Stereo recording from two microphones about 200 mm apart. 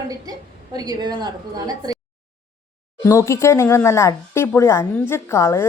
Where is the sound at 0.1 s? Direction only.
20° right (ahead or behind).